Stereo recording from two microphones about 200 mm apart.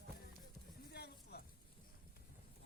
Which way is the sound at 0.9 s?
55° left (ahead or behind).